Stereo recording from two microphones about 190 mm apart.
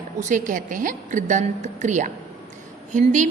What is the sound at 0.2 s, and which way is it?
A woman's voice, 40° right (ahead or behind).